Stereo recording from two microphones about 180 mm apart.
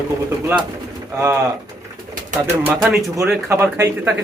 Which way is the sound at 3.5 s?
15° right (ahead or behind).